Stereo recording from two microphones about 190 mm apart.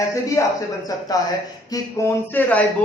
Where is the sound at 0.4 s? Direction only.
15° left (ahead or behind).